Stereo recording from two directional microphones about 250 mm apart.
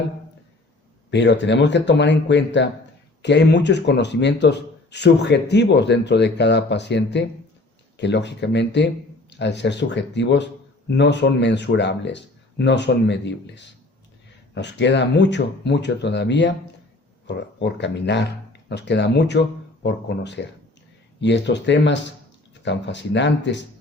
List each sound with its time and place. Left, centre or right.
1.1 s speech: left